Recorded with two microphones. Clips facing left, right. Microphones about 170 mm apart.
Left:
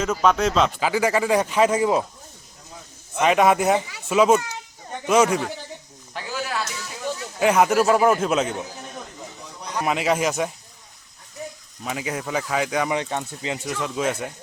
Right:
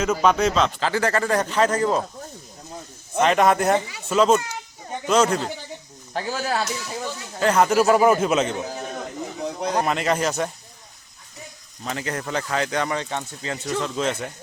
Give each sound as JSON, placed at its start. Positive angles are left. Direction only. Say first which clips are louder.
{"t": 0.0, "sound": "speech", "louder": "right 1 dB", "side_deg": 0}
{"t": 3.2, "sound": "speech", "louder": "even", "side_deg": 5}
{"t": 6.1, "sound": "speech", "louder": "right 4 dB", "side_deg": -35}
{"t": 7.3, "sound": "speech", "louder": "even", "side_deg": 5}
{"t": 9.4, "sound": "a sound", "louder": "right 14 dB", "side_deg": -75}
{"t": 9.8, "sound": "speech", "louder": "left 5 dB", "side_deg": 5}
{"t": 11.8, "sound": "speech", "louder": "even", "side_deg": 5}